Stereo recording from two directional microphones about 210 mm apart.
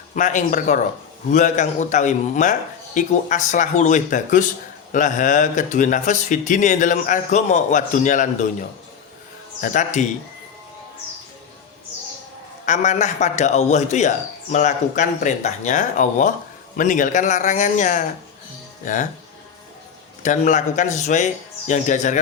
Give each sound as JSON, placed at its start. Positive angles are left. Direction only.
{"t": 0.2, "sound": "speech", "side_deg": 35}
{"t": 9.6, "sound": "speech", "side_deg": 40}
{"t": 12.6, "sound": "speech", "side_deg": 35}
{"t": 20.2, "sound": "speech", "side_deg": 35}